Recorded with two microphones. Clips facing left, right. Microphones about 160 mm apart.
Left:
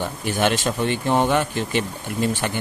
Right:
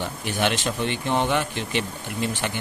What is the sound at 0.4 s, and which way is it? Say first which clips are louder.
Speech: left 3 dB; 45° left (ahead or behind).